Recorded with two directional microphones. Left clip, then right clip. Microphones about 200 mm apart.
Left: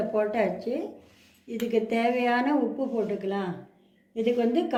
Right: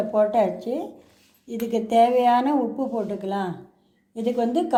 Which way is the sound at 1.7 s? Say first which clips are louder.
Right 7 dB; 40° right (ahead or behind).